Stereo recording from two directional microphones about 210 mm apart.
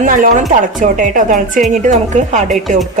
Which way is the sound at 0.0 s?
40° right (ahead or behind).